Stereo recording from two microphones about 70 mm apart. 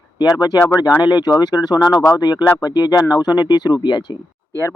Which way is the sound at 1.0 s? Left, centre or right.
Left.